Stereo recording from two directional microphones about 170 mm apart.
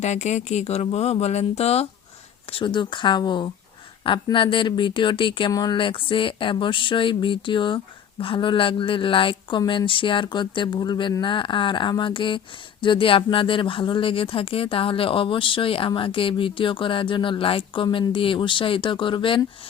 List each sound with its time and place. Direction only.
0.0 s speech: 40° left (ahead or behind)